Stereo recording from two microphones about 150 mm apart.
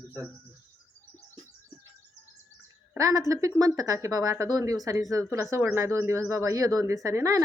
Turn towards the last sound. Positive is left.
turn(degrees=-20)  # may be behind; listen again after turning